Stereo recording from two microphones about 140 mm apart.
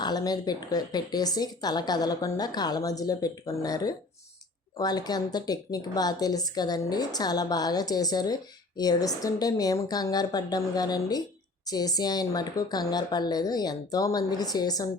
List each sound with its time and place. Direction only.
0.0 s speech: 30° left (ahead or behind)